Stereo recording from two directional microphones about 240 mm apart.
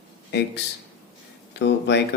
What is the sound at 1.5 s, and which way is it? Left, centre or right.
Speech, left.